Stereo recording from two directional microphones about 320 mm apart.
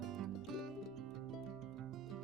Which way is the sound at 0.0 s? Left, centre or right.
Centre.